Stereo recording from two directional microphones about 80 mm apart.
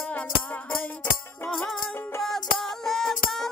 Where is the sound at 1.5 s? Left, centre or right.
Centre.